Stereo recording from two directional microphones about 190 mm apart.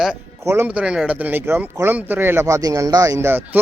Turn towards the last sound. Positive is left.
turn(degrees=-10)  # may be behind; listen again after turning